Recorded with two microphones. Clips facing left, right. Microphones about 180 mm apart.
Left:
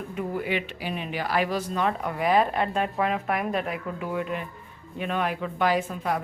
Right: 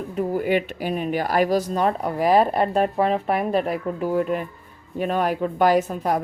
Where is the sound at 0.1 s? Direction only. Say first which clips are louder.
Right 7 dB; 40° right (ahead or behind).